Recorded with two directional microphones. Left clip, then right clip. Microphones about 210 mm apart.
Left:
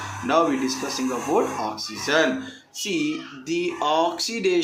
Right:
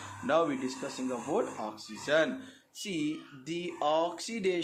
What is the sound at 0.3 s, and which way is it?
Speech, 40° right (ahead or behind).